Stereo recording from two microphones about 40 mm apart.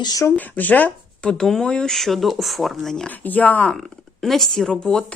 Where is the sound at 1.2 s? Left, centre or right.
Centre.